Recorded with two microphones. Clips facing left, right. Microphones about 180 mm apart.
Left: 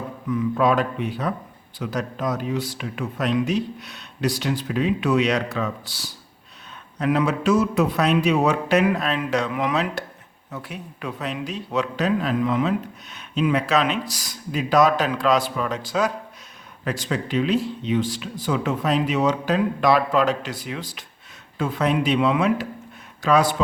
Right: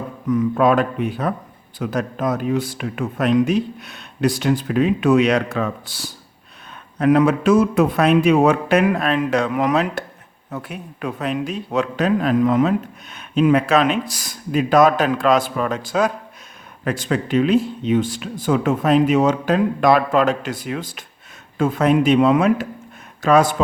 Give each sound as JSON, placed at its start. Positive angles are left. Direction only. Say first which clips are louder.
{"t": 0.3, "sound": "a man's voice", "louder": "right 4 dB", "side_deg": -45}